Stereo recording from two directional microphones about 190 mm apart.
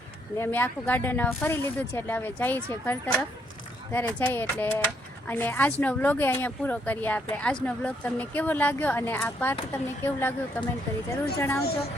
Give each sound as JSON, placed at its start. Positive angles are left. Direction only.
{"t": 0.3, "sound": "speech", "side_deg": 10}